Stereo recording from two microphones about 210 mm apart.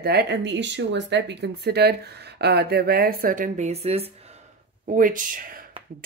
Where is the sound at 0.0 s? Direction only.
50° right (ahead or behind); by 4.1 s 30° right (ahead or behind).